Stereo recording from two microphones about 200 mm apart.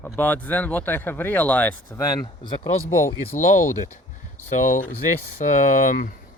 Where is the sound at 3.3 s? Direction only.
40° left (ahead or behind).